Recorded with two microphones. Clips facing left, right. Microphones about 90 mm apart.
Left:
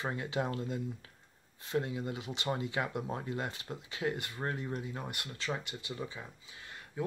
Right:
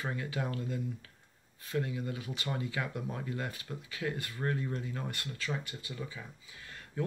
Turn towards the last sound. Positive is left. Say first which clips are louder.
# right 1 dB
turn(degrees=20)  # may be behind; listen again after turning